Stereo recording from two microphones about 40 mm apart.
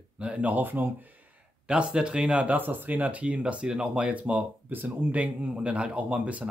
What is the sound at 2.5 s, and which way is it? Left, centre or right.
Speech, right.